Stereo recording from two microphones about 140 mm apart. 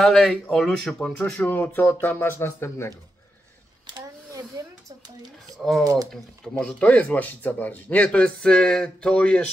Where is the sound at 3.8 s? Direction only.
30° right (ahead or behind).